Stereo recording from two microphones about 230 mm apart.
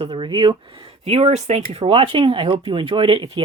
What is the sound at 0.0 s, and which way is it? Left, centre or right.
Speech, right.